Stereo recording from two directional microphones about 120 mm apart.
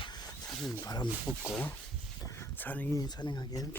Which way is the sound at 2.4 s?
15° left (ahead or behind).